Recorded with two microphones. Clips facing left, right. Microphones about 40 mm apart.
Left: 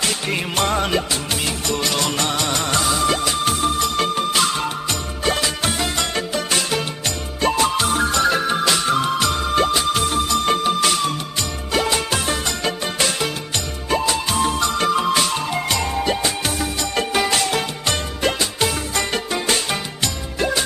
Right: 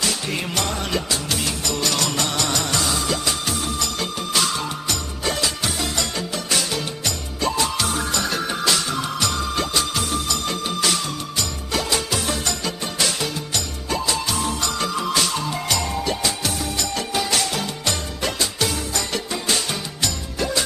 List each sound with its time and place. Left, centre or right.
0.0 s music: left
0.9 s music: left
11.7 s music: left